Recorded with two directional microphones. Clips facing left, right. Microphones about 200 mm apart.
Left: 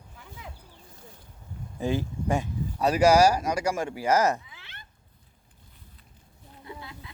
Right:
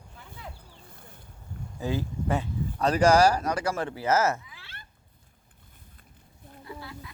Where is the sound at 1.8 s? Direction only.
15° left (ahead or behind).